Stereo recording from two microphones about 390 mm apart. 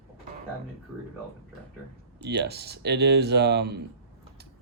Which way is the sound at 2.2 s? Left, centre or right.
Right.